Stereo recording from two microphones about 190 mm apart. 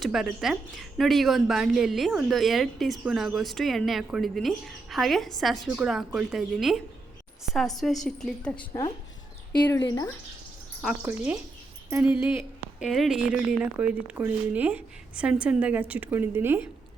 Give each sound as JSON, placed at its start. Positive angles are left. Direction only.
{"t": 0.0, "sound": "a woman's voice", "side_deg": 0}
{"t": 9.6, "sound": "speech", "side_deg": 15}
{"t": 10.8, "sound": "a woman's voice", "side_deg": -5}